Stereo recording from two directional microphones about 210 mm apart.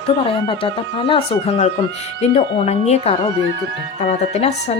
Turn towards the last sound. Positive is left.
turn(degrees=30)  # may be behind; listen again after turning